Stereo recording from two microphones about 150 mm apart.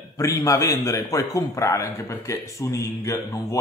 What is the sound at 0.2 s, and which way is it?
A man's voice, 20° left (ahead or behind).